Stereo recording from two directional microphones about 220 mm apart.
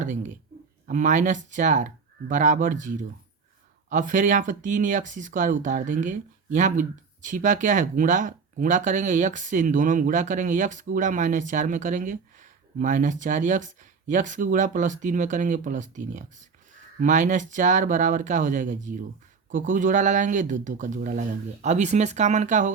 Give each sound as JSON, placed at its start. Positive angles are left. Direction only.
{"t": 0.0, "sound": "speech", "side_deg": -35}